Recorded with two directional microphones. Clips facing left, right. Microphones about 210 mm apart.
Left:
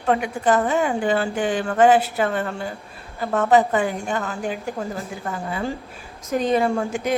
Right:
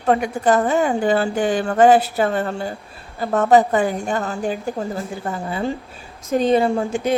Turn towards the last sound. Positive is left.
turn(degrees=-25)  # may be behind; listen again after turning